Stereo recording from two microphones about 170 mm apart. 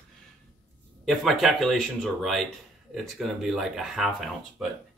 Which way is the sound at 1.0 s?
Centre (ahead or behind).